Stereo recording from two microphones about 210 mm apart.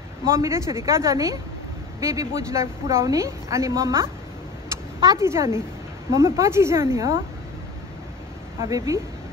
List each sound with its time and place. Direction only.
0.3 s a woman's voice: 15° right (ahead or behind)
4.6 s a sound: 15° right (ahead or behind)
6.1 s a woman's voice: 15° right (ahead or behind)
8.5 s a woman's voice: 15° right (ahead or behind)